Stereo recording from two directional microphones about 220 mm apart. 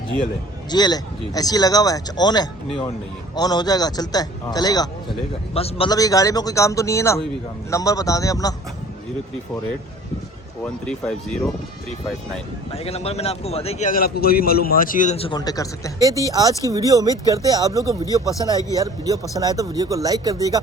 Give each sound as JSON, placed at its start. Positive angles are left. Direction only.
{"t": 0.7, "sound": "speech", "side_deg": 20}
{"t": 10.6, "sound": "speech", "side_deg": 5}
{"t": 12.7, "sound": "a man's voice", "side_deg": 25}
{"t": 16.0, "sound": "speech", "side_deg": -15}
{"t": 18.0, "sound": "speech", "side_deg": 15}
{"t": 18.7, "sound": "speech", "side_deg": -15}